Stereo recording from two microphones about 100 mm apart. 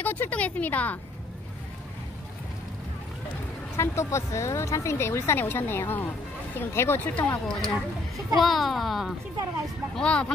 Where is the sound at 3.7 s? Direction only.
25° left (ahead or behind).